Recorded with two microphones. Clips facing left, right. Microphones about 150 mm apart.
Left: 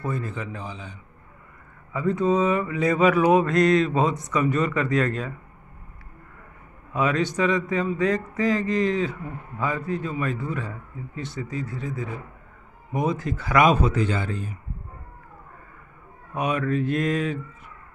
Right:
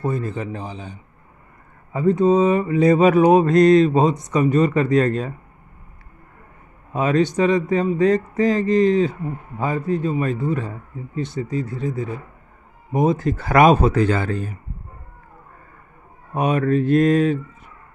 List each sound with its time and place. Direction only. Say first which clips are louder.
0.0 s a man's voice: right 5 dB; 30° right (ahead or behind)
6.9 s a man's voice: right 5 dB; 35° right (ahead or behind)
13.0 s speech: right 7 dB; 45° right (ahead or behind); by 14.5 s 60° right (ahead or behind)
16.3 s speech: right 6 dB; 45° right (ahead or behind)